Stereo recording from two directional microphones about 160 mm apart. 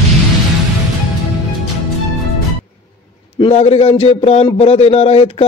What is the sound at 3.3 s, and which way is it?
Speech, 35° left (ahead or behind).